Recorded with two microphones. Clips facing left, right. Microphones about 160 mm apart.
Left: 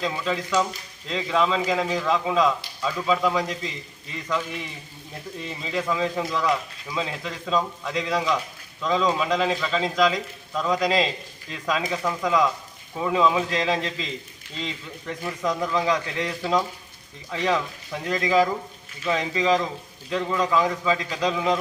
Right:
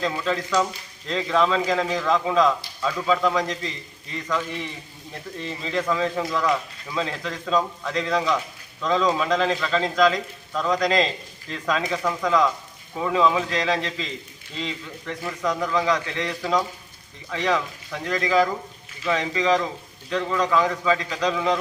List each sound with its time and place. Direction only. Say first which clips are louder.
0.0 s speech: right 1 dB; 5° left (ahead or behind)
5.4 s speech: right 2 dB; 5° left (ahead or behind)